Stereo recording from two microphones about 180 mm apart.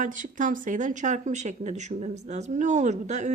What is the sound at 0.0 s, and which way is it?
A woman's voice, 45° right (ahead or behind).